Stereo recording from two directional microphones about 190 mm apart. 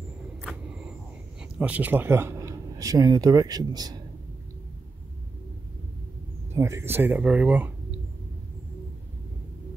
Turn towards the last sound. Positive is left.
turn(degrees=-10)  # may be behind; listen again after turning